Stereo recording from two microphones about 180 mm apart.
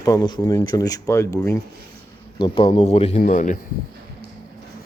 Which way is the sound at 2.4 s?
30° left (ahead or behind).